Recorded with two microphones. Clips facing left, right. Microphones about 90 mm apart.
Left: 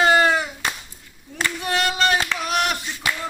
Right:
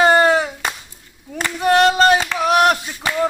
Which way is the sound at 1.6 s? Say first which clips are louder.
Right 10 dB; 40° right (ahead or behind).